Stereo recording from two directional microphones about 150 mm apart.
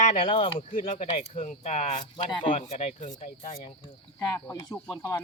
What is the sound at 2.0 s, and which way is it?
Speech, 30° left (ahead or behind).